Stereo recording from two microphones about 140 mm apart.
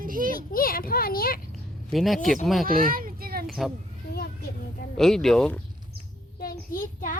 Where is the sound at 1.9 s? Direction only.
Centre (ahead or behind).